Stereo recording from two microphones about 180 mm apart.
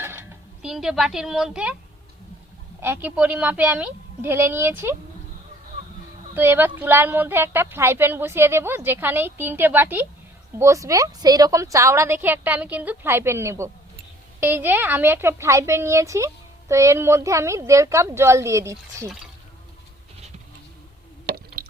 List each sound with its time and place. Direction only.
0.0 s speech: 15° right (ahead or behind)
2.8 s a woman's voice: 10° right (ahead or behind)
6.3 s a woman's voice: 10° right (ahead or behind)
21.2 s squish: 60° right (ahead or behind)